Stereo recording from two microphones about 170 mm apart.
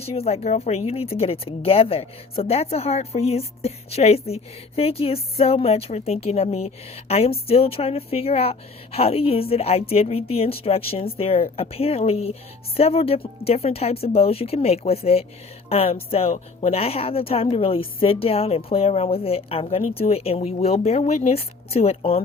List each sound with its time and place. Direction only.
0.0 s a woman's voice: 35° left (ahead or behind)